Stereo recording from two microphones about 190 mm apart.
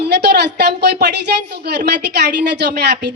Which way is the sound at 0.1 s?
60° right (ahead or behind).